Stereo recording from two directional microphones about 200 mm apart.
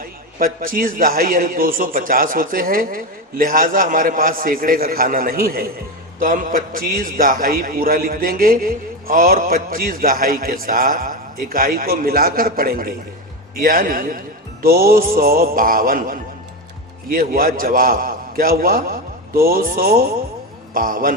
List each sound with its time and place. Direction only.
0.0 s a man's voice: 45° right (ahead or behind)